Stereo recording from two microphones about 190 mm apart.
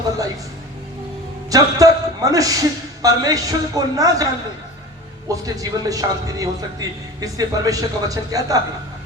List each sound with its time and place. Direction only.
1.5 s a man's voice: 20° right (ahead or behind)
5.3 s a man's voice: 20° right (ahead or behind)